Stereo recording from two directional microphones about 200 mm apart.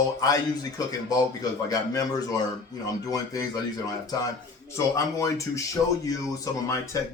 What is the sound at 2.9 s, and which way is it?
Speech, 20° left (ahead or behind).